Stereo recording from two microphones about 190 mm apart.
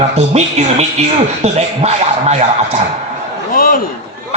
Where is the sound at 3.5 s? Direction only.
50° left (ahead or behind).